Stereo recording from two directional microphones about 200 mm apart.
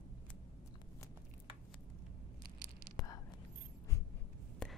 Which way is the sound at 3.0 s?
20° left (ahead or behind).